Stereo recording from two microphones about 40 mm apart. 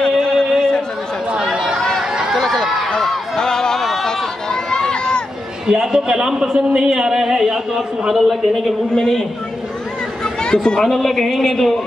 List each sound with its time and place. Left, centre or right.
0.2 s a sound: centre
0.6 s chatter: centre
1.3 s chatter: centre
1.8 s chatter: centre
2.4 s a sound: centre
3.3 s a sound: centre
4.5 s run: centre
5.9 s a man's voice: centre
8.1 s a man's voice: centre
8.9 s a woman's voice: centre
10.2 s chatter: centre
10.8 s a man's voice: centre